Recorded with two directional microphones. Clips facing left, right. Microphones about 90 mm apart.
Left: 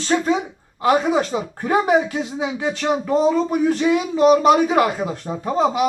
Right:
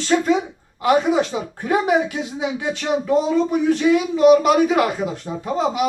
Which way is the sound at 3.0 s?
40° left (ahead or behind).